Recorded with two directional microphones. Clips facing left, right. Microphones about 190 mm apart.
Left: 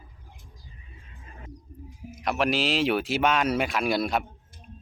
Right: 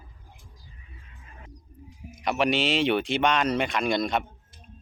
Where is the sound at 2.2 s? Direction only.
Centre (ahead or behind).